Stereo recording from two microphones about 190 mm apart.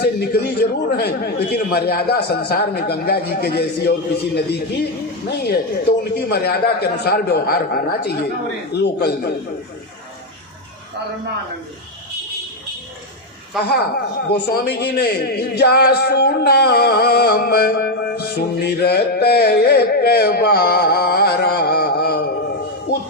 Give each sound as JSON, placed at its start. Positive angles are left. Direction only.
{"t": 0.0, "sound": "speech", "side_deg": 60}
{"t": 13.7, "sound": "speech", "side_deg": 55}